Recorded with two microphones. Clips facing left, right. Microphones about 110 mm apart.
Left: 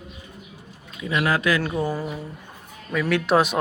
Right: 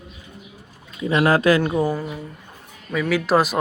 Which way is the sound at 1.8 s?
Centre (ahead or behind).